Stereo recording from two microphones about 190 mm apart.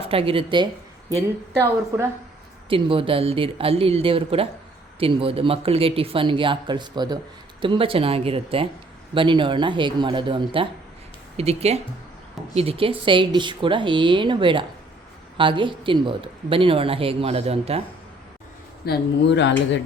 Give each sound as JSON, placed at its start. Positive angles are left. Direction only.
{"t": 0.1, "sound": "speech", "side_deg": -30}
{"t": 1.9, "sound": "speech", "side_deg": -15}
{"t": 2.6, "sound": "speech", "side_deg": -30}
{"t": 18.9, "sound": "speech", "side_deg": 65}